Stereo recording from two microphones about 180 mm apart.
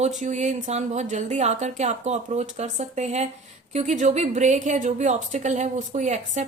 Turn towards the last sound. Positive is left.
turn(degrees=-40)  # may be behind; listen again after turning